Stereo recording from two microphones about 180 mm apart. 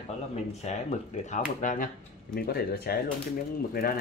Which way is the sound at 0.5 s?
40° left (ahead or behind).